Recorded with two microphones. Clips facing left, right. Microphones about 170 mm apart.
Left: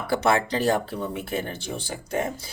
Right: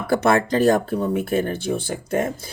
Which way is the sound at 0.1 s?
50° right (ahead or behind).